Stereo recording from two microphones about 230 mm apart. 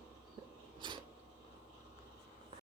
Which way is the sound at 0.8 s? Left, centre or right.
Centre.